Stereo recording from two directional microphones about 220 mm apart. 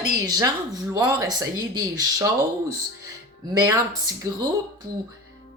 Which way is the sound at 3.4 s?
15° right (ahead or behind).